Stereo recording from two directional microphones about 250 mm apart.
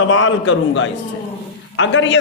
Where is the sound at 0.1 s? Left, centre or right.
Left.